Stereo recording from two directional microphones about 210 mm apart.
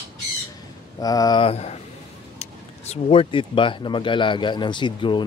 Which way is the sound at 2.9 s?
25° left (ahead or behind).